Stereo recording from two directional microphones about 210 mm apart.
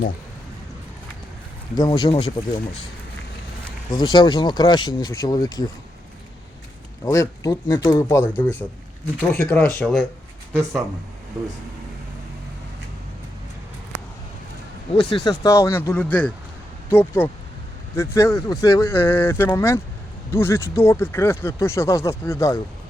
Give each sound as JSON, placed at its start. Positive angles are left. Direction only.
{"t": 1.7, "sound": "speech", "side_deg": 20}
{"t": 3.9, "sound": "speech", "side_deg": 20}
{"t": 7.0, "sound": "speech", "side_deg": 15}
{"t": 10.5, "sound": "speech", "side_deg": -15}
{"t": 15.1, "sound": "speech", "side_deg": 20}